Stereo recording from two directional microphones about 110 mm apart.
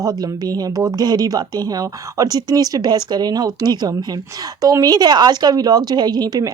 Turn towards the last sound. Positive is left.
turn(degrees=-35)  # may be behind; listen again after turning